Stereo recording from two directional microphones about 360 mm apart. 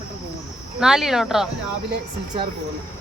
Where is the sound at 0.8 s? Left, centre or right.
Centre.